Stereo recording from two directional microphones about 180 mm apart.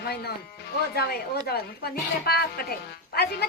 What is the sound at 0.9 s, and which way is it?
A woman's voice, 60° left (ahead or behind).